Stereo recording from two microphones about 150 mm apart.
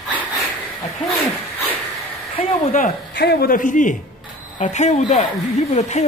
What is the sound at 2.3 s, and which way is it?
Speech, 50° left (ahead or behind).